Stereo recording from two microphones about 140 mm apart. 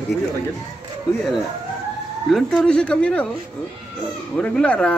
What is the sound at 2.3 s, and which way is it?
Speech, 5° left (ahead or behind).